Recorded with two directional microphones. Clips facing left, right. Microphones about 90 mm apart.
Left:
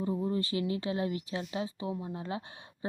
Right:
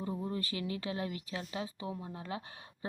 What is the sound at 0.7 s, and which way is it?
Speech, 30° left (ahead or behind).